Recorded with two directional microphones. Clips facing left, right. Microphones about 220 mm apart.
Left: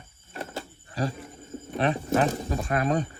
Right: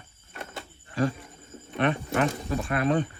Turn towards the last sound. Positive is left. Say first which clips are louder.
# right 1 dB
turn(degrees=40)  # may be behind; listen again after turning